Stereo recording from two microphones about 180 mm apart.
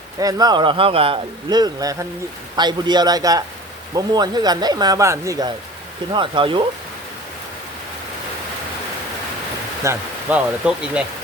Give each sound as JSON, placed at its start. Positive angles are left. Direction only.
{"t": 0.2, "sound": "speech", "side_deg": -20}
{"t": 9.8, "sound": "speech", "side_deg": -10}